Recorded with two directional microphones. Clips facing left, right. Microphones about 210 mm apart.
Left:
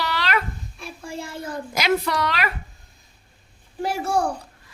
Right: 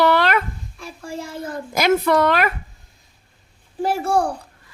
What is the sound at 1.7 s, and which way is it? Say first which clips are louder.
Speech: right 6 dB; 50° right (ahead or behind).